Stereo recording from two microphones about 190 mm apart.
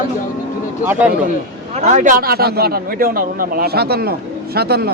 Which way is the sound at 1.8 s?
40° right (ahead or behind).